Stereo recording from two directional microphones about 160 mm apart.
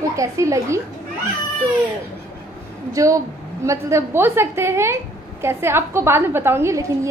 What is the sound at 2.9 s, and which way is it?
A woman's voice, 20° right (ahead or behind).